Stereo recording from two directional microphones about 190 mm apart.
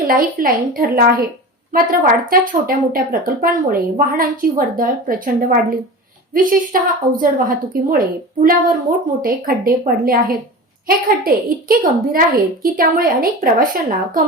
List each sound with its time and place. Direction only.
0.1 s speech: 50° right (ahead or behind)